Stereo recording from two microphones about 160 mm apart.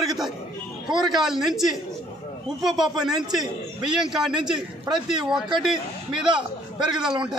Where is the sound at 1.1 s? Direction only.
Centre (ahead or behind).